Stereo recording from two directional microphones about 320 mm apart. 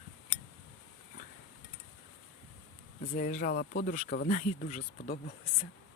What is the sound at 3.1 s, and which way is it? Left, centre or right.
Speech, left.